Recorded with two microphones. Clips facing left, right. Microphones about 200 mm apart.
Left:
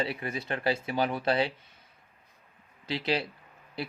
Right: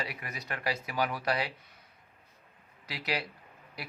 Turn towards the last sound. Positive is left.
turn(degrees=25)  # may be behind; listen again after turning